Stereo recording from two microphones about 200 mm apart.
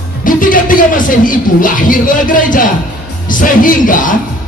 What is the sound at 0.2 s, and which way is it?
A man's voice, 40° left (ahead or behind).